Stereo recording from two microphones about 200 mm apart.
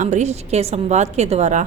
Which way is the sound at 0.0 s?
35° right (ahead or behind).